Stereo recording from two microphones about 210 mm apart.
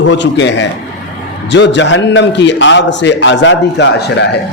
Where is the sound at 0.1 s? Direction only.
60° left (ahead or behind).